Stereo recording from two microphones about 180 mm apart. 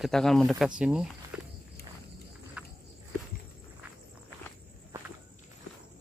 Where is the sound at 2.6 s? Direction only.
5° right (ahead or behind).